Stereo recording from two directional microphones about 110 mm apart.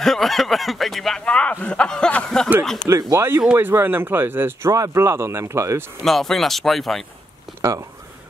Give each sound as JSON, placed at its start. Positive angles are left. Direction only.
{"t": 0.0, "sound": "speech", "side_deg": 0}
{"t": 2.9, "sound": "speech", "side_deg": -30}
{"t": 6.0, "sound": "speech", "side_deg": 0}